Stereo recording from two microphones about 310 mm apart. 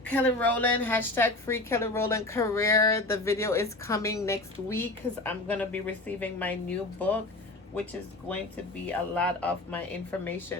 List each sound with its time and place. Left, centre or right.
0.0 s a woman's voice: centre
8.9 s speech: centre